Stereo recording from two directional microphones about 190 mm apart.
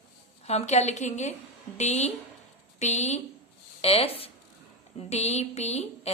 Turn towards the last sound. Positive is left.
turn(degrees=35)  # may be behind; listen again after turning